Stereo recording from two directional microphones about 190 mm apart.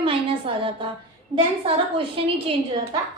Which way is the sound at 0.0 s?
30° right (ahead or behind).